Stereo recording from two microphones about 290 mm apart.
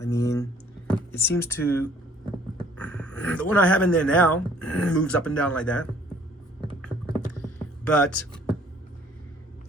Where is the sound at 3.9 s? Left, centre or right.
Centre.